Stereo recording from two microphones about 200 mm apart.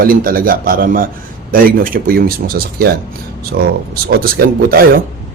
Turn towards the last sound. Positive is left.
turn(degrees=-50)  # may be behind; listen again after turning